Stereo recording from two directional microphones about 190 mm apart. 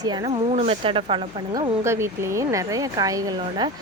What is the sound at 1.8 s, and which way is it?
Speech, 15° right (ahead or behind).